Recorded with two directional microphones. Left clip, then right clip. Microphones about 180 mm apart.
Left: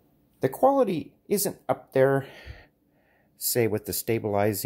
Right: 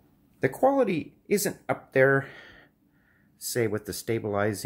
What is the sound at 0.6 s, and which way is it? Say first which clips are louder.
Speech: left 2 dB; 20° left (ahead or behind).